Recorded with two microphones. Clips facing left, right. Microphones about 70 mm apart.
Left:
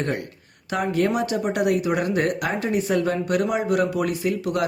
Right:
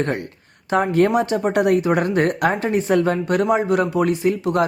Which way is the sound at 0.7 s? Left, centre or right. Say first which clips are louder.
Right 5 dB; right.